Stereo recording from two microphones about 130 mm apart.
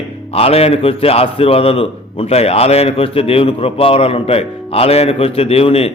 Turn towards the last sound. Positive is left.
turn(degrees=50)  # may be behind; listen again after turning